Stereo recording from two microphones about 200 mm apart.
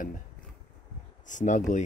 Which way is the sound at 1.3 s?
40° left (ahead or behind).